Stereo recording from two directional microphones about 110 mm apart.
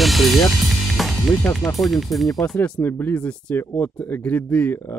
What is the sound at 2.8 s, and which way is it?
Speech, 20° left (ahead or behind).